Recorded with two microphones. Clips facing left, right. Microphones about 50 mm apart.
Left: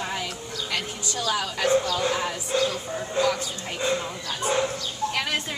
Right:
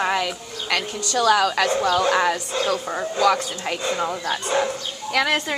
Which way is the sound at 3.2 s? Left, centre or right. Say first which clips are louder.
Right 6 dB; right.